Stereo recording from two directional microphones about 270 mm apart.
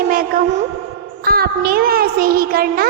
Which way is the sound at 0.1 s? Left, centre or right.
Right.